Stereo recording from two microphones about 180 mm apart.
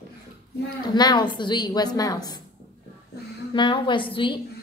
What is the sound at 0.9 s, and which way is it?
A woman's voice, 25° left (ahead or behind).